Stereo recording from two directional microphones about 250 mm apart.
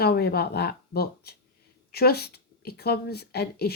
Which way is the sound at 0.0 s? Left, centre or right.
Left.